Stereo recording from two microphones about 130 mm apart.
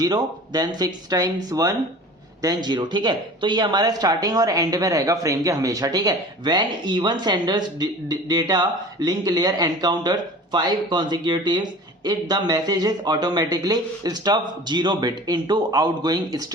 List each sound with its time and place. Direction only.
0.0 s speech: 30° right (ahead or behind)